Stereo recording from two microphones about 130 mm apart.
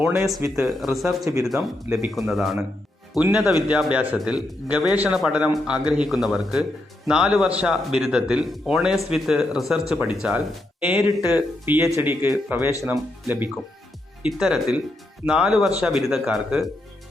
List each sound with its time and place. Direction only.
0.3 s speech: 25° right (ahead or behind)
0.6 s a man's voice: centre (ahead or behind)
1.2 s speech: 25° right (ahead or behind)
1.5 s a man's voice: 5° right (ahead or behind)
14.2 s a man's voice: 5° right (ahead or behind)